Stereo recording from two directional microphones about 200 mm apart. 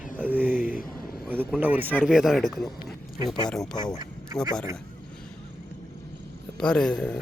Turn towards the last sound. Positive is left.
turn(degrees=5)  # may be behind; listen again after turning